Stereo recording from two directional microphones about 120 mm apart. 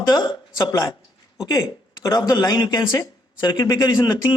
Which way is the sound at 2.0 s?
35° left (ahead or behind).